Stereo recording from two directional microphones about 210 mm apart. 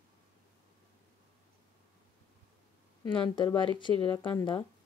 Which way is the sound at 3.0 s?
20° left (ahead or behind).